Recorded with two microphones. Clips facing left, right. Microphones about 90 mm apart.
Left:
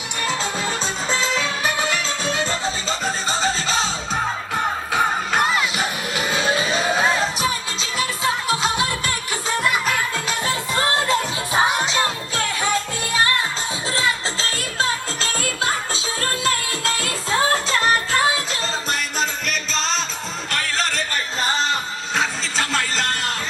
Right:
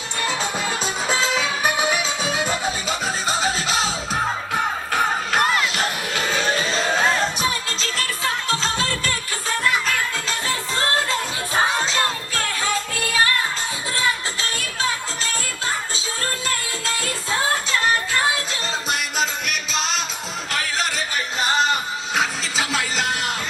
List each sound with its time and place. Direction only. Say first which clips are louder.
0.2 s music: even; 10° right (ahead or behind)
5.3 s crowd: even; centre (ahead or behind)
6.3 s music: left 2 dB; 10° left (ahead or behind)
13.9 s music: left 1 dB; 30° left (ahead or behind)
18.9 s music: right 2 dB; 5° right (ahead or behind)